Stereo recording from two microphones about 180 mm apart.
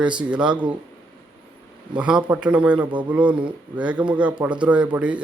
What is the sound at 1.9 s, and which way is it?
A man's voice, 5° right (ahead or behind).